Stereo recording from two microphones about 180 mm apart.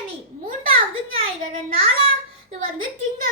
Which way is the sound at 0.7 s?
30° right (ahead or behind).